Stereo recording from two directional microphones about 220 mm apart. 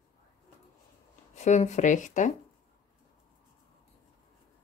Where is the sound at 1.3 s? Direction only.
30° left (ahead or behind).